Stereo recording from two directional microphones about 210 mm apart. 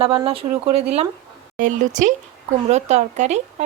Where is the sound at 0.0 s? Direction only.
25° right (ahead or behind).